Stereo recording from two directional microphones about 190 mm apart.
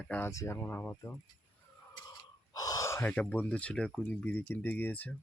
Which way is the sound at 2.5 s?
20° left (ahead or behind).